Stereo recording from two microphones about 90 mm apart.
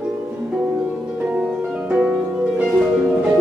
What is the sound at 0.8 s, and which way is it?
Harp, 15° right (ahead or behind).